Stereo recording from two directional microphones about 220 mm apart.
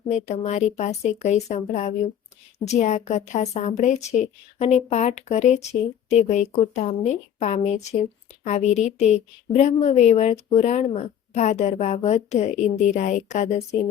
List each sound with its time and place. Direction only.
0.1 s speech: 30° left (ahead or behind)